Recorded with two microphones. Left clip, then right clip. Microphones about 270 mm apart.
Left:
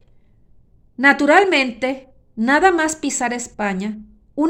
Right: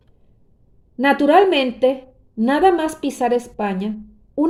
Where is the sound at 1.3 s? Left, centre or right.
Left.